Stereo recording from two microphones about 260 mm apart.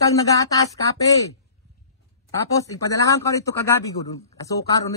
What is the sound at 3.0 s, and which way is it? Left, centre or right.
Speech, centre.